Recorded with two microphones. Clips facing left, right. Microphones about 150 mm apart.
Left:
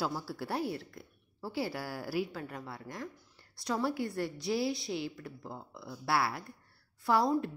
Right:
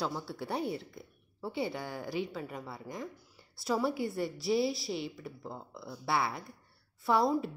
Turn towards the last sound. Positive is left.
turn(degrees=0)  # may be behind; listen again after turning